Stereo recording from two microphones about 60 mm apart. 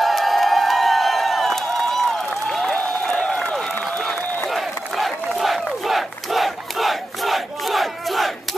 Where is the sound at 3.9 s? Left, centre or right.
Centre.